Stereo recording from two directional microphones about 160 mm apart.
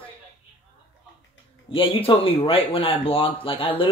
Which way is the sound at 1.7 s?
35° left (ahead or behind).